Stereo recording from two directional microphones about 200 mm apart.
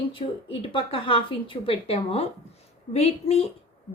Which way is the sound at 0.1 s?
25° left (ahead or behind).